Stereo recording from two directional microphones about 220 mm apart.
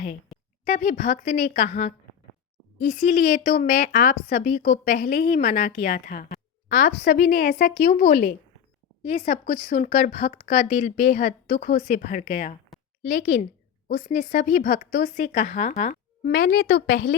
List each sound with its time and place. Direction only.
0.6 s speech: 40° left (ahead or behind)